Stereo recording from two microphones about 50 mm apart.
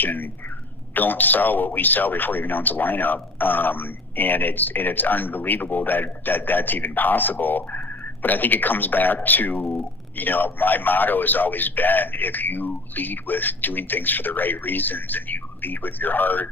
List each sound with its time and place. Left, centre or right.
0.0 s speech: left